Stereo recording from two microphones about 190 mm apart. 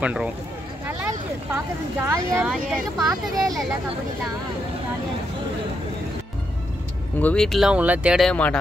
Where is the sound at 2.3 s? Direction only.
5° right (ahead or behind).